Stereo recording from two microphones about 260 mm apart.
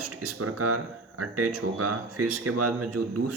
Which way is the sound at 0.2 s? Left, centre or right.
Right.